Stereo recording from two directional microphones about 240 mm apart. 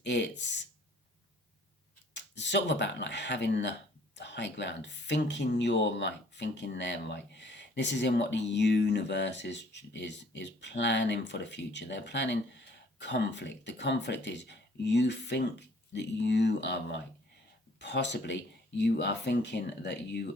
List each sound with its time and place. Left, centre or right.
0.0 s speech: left
2.1 s speech: left